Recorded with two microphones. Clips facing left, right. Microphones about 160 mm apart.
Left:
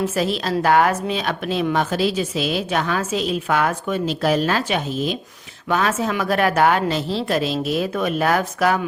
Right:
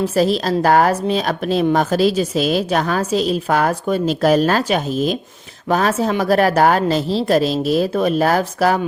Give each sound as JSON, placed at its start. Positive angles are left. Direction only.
{"t": 0.0, "sound": "a woman's voice", "side_deg": -40}